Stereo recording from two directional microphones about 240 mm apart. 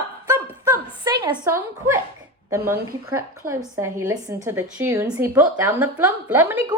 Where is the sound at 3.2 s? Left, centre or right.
Centre.